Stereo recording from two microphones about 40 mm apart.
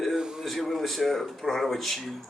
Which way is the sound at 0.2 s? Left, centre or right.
Centre.